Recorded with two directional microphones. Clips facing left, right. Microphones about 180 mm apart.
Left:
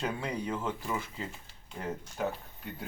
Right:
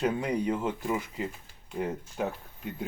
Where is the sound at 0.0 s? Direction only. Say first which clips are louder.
Right 6 dB; 15° right (ahead or behind).